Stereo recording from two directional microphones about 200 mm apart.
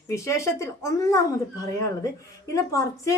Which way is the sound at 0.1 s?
15° left (ahead or behind).